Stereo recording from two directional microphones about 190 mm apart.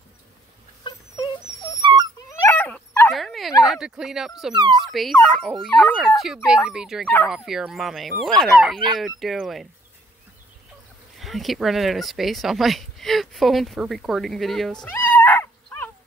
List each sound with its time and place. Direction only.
0.8 s dog: 20° left (ahead or behind)
1.8 s dog: 25° right (ahead or behind)
2.4 s dog: 10° left (ahead or behind)
3.7 s speech: 5° right (ahead or behind)
11.1 s speech: centre (ahead or behind)